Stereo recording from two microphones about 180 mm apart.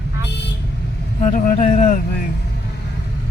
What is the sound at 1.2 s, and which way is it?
Speech, 45° left (ahead or behind).